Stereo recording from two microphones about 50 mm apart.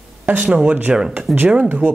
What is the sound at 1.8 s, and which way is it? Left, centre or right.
Speech, right.